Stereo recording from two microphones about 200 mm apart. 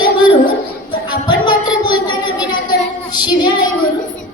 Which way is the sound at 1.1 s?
25° left (ahead or behind).